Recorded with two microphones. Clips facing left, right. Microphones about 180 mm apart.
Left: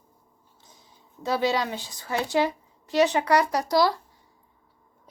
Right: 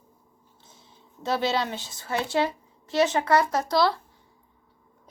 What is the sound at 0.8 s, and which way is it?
Speech, 10° left (ahead or behind).